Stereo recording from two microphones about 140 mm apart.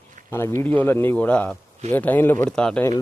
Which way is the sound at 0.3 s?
15° left (ahead or behind).